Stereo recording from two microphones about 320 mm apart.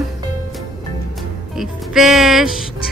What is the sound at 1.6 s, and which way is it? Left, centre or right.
Speech, centre.